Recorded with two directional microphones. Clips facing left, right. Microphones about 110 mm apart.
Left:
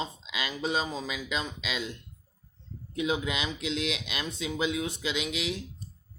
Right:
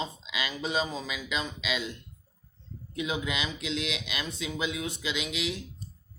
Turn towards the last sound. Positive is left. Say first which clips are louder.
# left 1 dB
turn(degrees=40)  # may be behind; listen again after turning